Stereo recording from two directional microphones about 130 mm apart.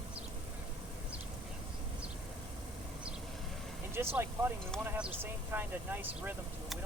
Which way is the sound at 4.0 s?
15° right (ahead or behind).